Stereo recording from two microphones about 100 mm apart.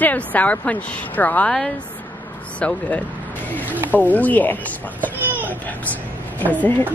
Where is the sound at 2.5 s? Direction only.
10° left (ahead or behind).